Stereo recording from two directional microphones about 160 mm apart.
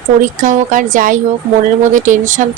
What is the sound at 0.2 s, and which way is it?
A woman's voice, 55° right (ahead or behind).